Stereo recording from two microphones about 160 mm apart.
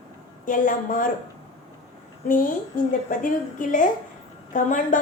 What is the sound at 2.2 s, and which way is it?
A woman's voice, 60° left (ahead or behind).